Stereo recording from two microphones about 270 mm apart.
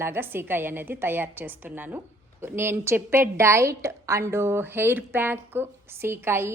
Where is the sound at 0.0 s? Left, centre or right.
Centre.